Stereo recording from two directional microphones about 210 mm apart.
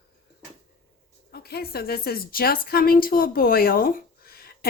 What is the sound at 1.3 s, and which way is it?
A woman's voice, 45° left (ahead or behind).